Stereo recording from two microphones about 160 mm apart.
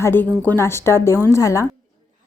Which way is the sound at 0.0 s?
10° left (ahead or behind).